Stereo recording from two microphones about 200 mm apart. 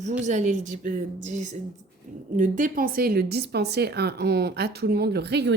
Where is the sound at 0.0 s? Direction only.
35° right (ahead or behind).